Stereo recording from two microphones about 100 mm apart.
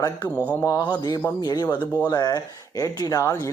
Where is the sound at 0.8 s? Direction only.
45° left (ahead or behind).